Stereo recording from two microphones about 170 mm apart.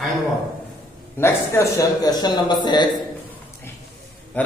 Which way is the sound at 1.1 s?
15° left (ahead or behind).